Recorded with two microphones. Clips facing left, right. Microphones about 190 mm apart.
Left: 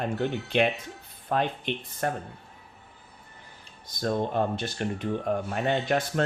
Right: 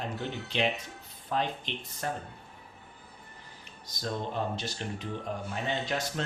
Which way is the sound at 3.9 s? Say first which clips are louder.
Left 7 dB; 55° left (ahead or behind).